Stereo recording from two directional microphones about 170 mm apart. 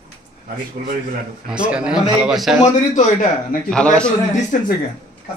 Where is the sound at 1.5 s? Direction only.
5° right (ahead or behind).